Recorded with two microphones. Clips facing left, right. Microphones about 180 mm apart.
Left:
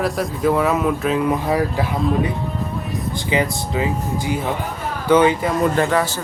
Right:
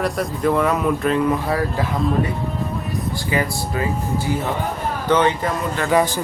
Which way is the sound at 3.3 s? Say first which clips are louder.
Left 3 dB; 20° left (ahead or behind).